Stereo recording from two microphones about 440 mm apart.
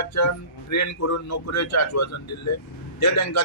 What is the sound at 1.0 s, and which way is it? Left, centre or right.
A man's voice, left.